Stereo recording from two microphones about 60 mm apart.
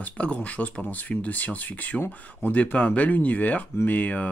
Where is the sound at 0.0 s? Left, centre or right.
Left.